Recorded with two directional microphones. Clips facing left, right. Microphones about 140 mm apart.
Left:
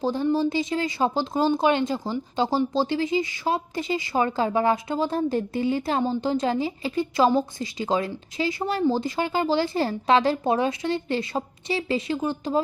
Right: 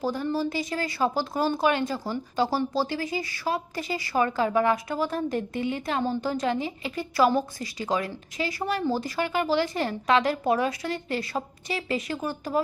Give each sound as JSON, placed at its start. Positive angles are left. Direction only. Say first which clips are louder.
{"t": 0.0, "sound": "a woman's voice", "louder": "left 4 dB", "side_deg": 25}